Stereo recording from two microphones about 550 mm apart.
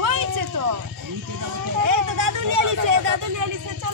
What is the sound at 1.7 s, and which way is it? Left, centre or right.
Vehicle, right.